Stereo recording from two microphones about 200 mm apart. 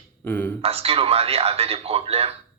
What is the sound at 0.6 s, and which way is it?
Speech, 30° right (ahead or behind).